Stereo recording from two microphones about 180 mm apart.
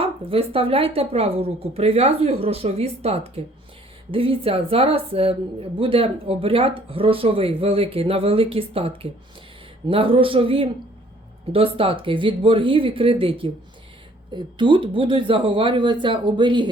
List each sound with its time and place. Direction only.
0.0 s speech: 30° right (ahead or behind)